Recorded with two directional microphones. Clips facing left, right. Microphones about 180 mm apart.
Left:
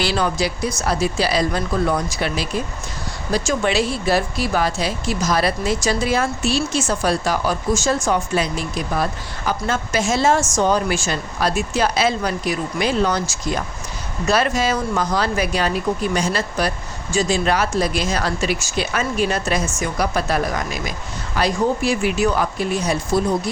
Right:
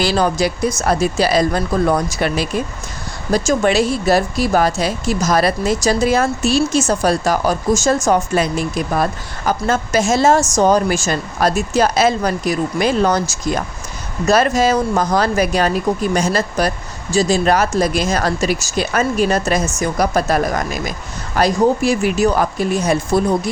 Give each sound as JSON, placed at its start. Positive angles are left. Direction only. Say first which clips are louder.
{"t": 0.0, "sound": "speech", "louder": "right 4 dB", "side_deg": -40}